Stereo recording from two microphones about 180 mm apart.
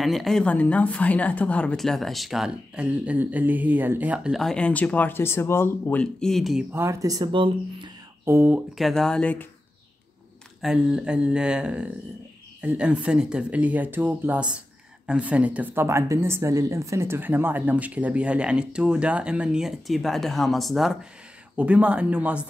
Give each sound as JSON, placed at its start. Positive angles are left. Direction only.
{"t": 0.0, "sound": "speech", "side_deg": 0}
{"t": 6.7, "sound": "speech", "side_deg": -15}
{"t": 8.3, "sound": "speech", "side_deg": -10}
{"t": 10.6, "sound": "speech", "side_deg": -5}